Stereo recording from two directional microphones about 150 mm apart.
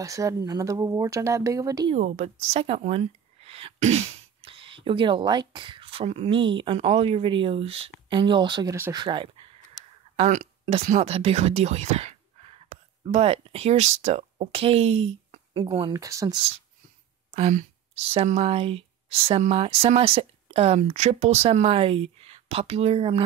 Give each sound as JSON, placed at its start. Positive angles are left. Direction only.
{"t": 0.0, "sound": "speech", "side_deg": -20}
{"t": 2.0, "sound": "speech", "side_deg": -50}
{"t": 10.1, "sound": "a sound", "side_deg": -50}
{"t": 10.9, "sound": "speech", "side_deg": -45}
{"t": 15.9, "sound": "speech", "side_deg": -20}
{"t": 17.3, "sound": "speech", "side_deg": -50}